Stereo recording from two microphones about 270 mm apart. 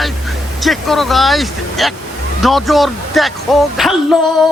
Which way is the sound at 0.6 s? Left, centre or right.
Centre.